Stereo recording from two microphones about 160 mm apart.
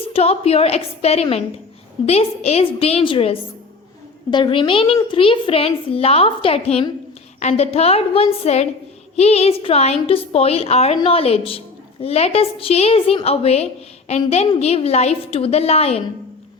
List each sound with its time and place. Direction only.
0.1 s a woman's voice: 40° left (ahead or behind)